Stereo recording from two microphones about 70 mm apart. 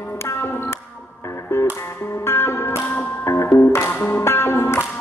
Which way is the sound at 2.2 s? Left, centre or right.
Left.